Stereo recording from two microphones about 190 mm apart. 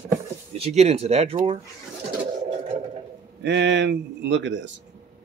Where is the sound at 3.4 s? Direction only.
65° right (ahead or behind).